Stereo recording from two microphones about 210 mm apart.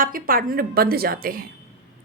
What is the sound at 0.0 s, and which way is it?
A woman's voice, 40° right (ahead or behind).